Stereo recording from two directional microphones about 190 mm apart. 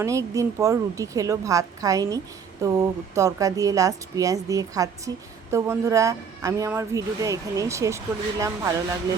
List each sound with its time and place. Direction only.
0.0 s a woman's voice: 15° right (ahead or behind)